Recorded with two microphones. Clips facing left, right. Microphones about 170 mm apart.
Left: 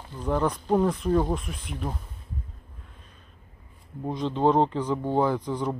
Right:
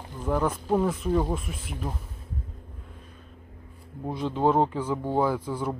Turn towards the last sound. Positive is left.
turn(degrees=-10)  # may be behind; listen again after turning